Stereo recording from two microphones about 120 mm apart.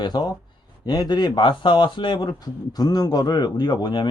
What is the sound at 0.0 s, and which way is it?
A man's voice, 35° left (ahead or behind).